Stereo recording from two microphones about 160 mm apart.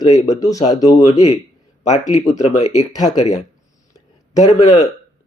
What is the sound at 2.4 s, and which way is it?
Speech, 45° left (ahead or behind).